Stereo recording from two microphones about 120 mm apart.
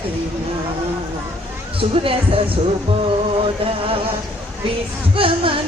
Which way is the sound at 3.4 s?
50° right (ahead or behind).